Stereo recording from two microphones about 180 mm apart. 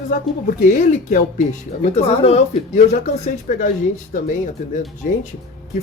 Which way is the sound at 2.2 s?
40° left (ahead or behind).